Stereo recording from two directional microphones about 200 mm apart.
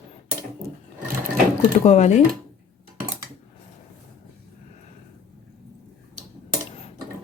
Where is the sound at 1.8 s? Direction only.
35° left (ahead or behind).